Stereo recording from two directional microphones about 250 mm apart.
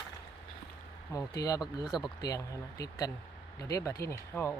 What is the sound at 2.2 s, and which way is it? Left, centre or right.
Speech, centre.